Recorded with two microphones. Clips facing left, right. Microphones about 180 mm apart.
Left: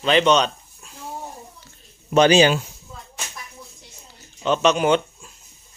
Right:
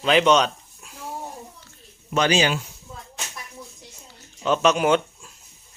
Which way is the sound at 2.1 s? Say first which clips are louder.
Left 6 dB; 25° left (ahead or behind).